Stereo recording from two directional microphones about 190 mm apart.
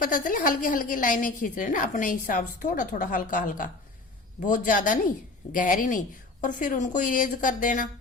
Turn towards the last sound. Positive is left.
turn(degrees=45)  # may be behind; listen again after turning